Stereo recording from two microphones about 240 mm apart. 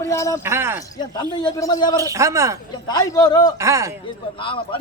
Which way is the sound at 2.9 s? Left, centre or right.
Centre.